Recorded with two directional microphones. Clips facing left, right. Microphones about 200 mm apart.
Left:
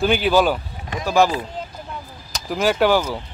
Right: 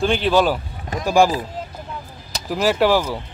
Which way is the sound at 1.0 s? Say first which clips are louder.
Right 2 dB; 10° right (ahead or behind).